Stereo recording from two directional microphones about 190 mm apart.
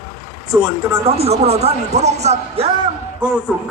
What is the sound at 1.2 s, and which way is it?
Speech, 35° right (ahead or behind).